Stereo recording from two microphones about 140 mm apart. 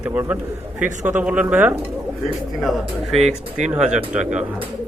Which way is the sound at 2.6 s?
Centre (ahead or behind).